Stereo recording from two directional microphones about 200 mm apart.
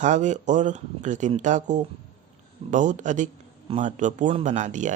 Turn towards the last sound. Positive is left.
turn(degrees=-40)  # may be behind; listen again after turning